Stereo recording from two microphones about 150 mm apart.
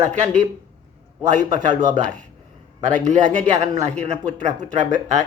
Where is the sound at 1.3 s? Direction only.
55° right (ahead or behind).